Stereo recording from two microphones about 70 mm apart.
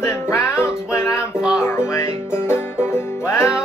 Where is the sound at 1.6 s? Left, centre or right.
Left.